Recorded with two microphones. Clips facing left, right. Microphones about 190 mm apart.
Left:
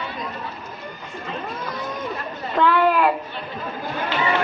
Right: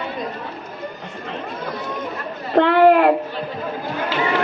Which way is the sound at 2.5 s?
60° right (ahead or behind).